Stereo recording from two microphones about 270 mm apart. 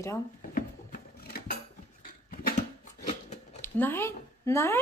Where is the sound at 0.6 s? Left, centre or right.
Left.